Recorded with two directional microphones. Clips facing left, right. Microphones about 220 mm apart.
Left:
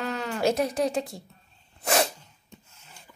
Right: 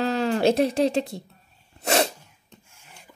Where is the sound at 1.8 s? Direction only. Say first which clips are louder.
Right 3 dB; 25° right (ahead or behind).